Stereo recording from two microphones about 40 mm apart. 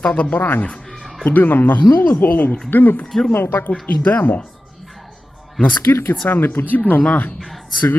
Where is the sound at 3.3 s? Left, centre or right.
Left.